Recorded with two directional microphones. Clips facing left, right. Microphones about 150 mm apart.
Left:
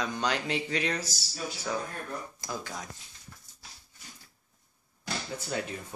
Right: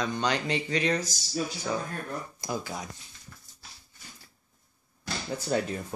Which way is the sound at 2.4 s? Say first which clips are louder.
Right 4 dB; 10° right (ahead or behind).